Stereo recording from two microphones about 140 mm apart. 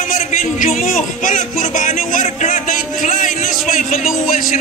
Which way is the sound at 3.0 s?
60° left (ahead or behind).